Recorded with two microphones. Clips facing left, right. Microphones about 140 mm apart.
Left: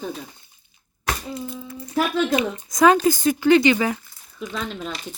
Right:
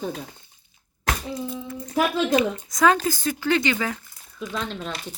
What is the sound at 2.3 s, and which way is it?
A woman's voice, 15° left (ahead or behind).